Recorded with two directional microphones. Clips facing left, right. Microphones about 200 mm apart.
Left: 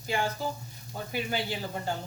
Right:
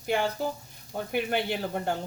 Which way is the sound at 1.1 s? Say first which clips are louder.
Right 4 dB; 60° right (ahead or behind).